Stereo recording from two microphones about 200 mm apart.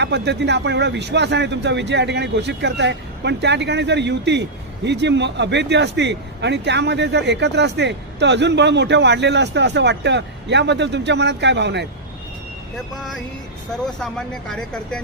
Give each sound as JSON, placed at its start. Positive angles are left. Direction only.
{"t": 0.0, "sound": "a man's voice", "side_deg": -60}
{"t": 13.8, "sound": "speech", "side_deg": 5}